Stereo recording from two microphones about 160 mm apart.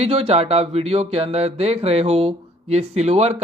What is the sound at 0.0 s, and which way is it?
Speech, 40° right (ahead or behind).